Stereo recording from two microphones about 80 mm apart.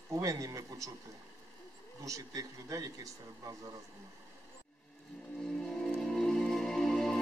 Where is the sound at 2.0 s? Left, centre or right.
Right.